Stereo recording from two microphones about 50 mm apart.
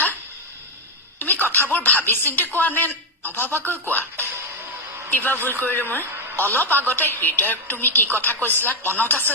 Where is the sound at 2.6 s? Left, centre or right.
Left.